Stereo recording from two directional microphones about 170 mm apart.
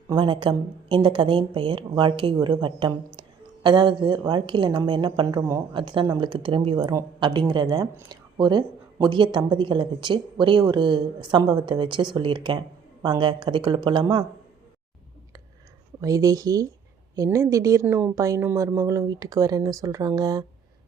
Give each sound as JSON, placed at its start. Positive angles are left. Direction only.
{"t": 0.1, "sound": "speech", "side_deg": -30}
{"t": 16.0, "sound": "speech", "side_deg": -20}